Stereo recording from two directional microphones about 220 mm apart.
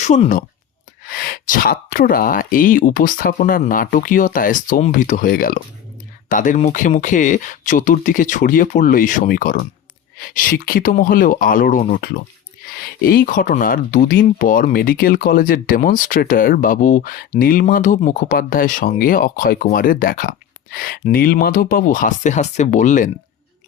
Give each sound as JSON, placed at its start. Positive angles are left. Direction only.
{"t": 0.0, "sound": "speech", "side_deg": 35}